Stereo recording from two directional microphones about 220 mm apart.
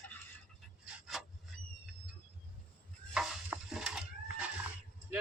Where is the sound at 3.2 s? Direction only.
Centre (ahead or behind).